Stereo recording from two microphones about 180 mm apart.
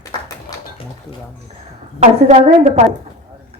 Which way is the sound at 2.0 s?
40° right (ahead or behind).